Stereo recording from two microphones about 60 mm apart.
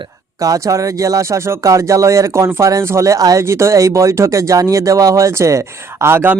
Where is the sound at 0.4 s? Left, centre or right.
Right.